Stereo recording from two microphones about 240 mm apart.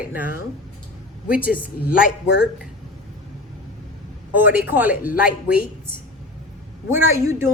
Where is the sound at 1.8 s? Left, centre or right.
Left.